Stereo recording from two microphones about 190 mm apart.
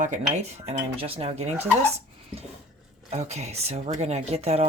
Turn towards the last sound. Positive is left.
turn(degrees=-35)  # may be behind; listen again after turning